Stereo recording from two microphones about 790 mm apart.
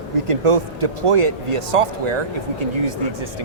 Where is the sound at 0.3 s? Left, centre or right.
Right.